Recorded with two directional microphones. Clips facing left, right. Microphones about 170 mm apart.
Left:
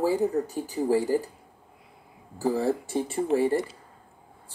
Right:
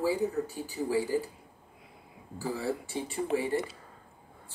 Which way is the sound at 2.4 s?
45° left (ahead or behind).